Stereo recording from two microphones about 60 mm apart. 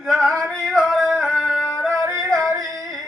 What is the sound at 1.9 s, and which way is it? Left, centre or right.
Yodeling, right.